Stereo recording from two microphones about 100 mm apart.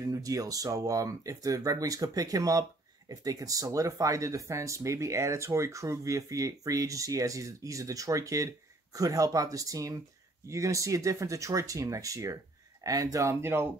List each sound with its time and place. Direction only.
0.0 s speech: 35° right (ahead or behind)